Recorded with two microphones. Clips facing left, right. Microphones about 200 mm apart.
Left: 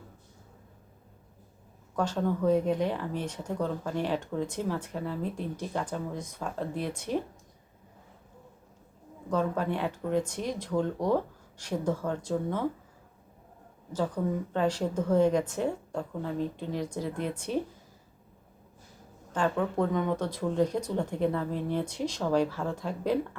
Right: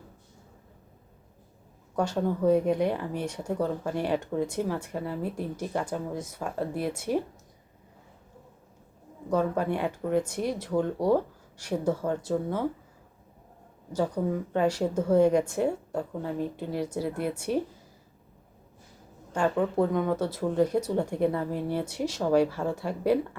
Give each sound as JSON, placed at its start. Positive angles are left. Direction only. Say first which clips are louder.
{"t": 2.0, "sound": "speech", "louder": "right 2 dB", "side_deg": -10}
{"t": 9.3, "sound": "speech", "louder": "right 2 dB", "side_deg": -10}
{"t": 13.9, "sound": "speech", "louder": "right 2 dB", "side_deg": -10}
{"t": 19.3, "sound": "speech", "louder": "right 2 dB", "side_deg": -10}